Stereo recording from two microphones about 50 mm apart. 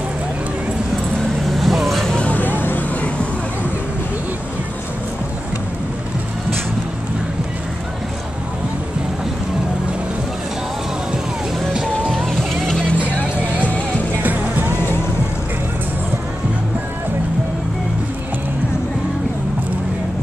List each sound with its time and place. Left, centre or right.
1.6 s vehicle: centre
2.3 s vehicle: left
12.1 s music: centre
14.2 s music: right